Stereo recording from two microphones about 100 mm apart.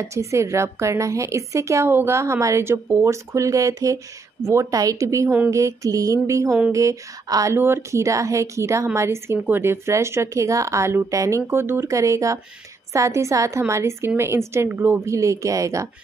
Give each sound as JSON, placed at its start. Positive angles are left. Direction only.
{"t": 0.0, "sound": "a woman's voice", "side_deg": -30}